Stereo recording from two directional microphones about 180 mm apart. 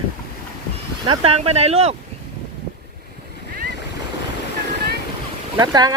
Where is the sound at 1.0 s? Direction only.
30° right (ahead or behind).